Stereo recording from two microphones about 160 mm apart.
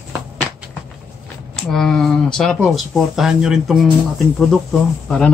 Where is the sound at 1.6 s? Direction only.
5° left (ahead or behind).